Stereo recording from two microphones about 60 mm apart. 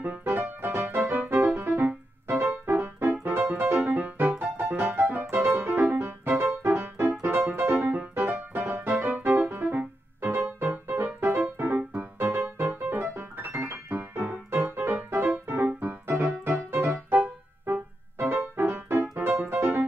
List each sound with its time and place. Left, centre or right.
0.2 s music: right
13.5 s keyboard: right
13.8 s keyboard: right
14.2 s music: right